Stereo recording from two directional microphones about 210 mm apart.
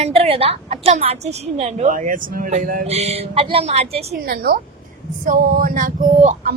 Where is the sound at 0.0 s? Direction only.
30° right (ahead or behind).